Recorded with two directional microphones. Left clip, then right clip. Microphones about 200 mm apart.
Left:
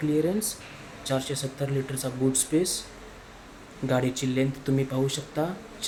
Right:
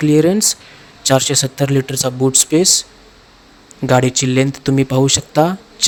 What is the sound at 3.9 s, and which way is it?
A man's voice, 50° right (ahead or behind).